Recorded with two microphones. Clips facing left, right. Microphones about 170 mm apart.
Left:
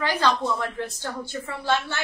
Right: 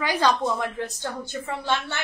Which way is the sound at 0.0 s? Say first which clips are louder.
Right 1 dB; 15° right (ahead or behind).